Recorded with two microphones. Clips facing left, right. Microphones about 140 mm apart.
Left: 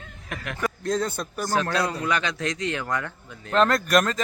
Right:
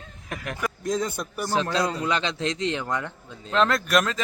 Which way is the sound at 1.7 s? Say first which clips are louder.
Even; 20° right (ahead or behind).